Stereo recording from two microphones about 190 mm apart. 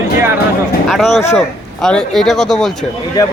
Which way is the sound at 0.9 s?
Centre (ahead or behind).